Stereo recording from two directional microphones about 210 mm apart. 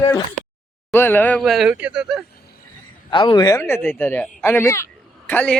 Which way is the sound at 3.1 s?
20° left (ahead or behind).